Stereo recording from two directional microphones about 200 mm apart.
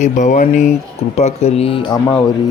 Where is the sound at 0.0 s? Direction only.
35° left (ahead or behind).